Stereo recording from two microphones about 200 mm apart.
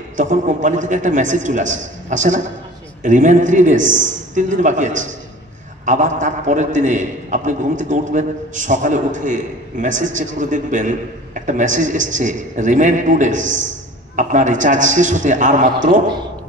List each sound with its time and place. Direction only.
0.2 s a man's voice: 40° right (ahead or behind)